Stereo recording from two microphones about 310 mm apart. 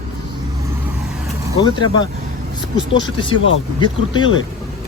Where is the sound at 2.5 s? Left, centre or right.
Centre.